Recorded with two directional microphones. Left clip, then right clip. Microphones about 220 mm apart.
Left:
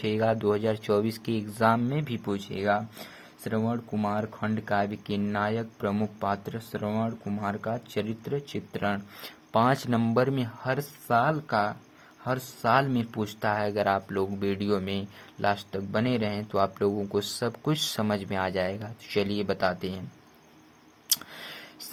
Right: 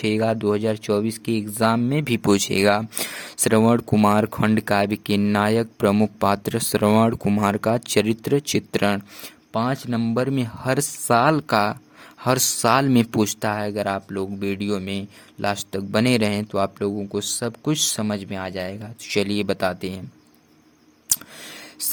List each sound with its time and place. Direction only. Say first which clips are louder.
0.0 s speech: right 4 dB; 30° right (ahead or behind)
9.2 s speech: left 2 dB; 20° right (ahead or behind)
21.1 s a sound: right 3 dB; 25° right (ahead or behind)